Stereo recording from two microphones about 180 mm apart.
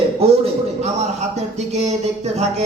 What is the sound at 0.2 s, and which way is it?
Speech, 35° right (ahead or behind).